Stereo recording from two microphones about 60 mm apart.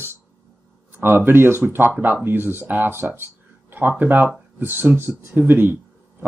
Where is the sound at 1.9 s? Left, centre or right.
Right.